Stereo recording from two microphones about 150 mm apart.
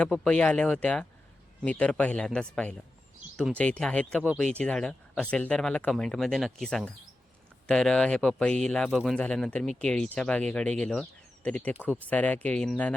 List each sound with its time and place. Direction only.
0.0 s speech: 5° left (ahead or behind)